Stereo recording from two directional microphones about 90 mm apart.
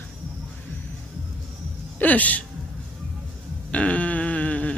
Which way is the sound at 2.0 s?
15° left (ahead or behind).